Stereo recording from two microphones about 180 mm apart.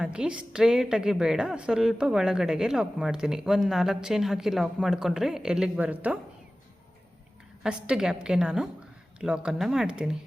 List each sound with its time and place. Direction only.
0.0 s a woman's voice: 5° right (ahead or behind)
7.6 s a woman's voice: 5° right (ahead or behind)